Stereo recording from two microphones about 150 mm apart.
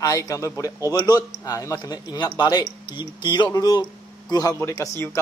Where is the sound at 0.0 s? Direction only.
20° left (ahead or behind).